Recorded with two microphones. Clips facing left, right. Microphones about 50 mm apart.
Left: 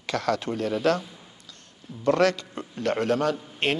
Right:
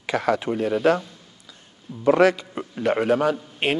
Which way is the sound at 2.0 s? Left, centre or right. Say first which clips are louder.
Right 4 dB; centre.